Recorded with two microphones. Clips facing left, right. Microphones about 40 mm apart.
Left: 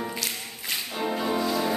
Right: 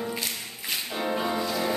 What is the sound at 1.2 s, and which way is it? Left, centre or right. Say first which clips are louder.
Music: left 2 dB; centre.